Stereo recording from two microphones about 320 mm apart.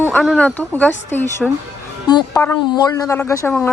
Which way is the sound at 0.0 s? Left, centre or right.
Centre.